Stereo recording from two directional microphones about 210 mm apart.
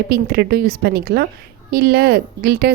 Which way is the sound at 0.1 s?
50° right (ahead or behind).